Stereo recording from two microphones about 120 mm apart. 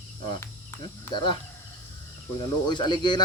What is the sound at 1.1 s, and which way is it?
Speech, 45° left (ahead or behind).